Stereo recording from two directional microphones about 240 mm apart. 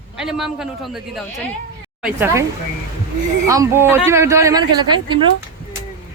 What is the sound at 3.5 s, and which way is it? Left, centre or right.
Speech, centre.